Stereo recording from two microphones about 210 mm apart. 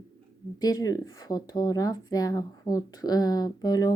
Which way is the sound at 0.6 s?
15° left (ahead or behind).